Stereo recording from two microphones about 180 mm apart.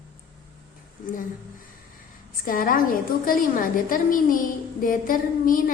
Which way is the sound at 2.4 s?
50° left (ahead or behind).